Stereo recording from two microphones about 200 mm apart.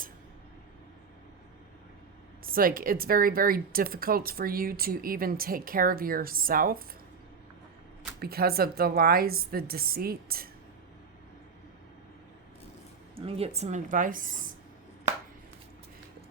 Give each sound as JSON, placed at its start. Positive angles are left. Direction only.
{"t": 2.4, "sound": "speech", "side_deg": -45}
{"t": 8.2, "sound": "speech", "side_deg": -50}
{"t": 13.1, "sound": "speech", "side_deg": -30}